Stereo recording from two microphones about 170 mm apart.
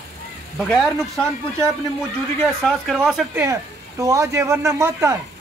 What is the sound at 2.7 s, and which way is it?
Speech, centre (ahead or behind).